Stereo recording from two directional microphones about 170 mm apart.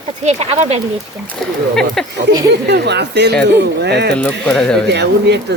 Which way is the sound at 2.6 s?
80° right.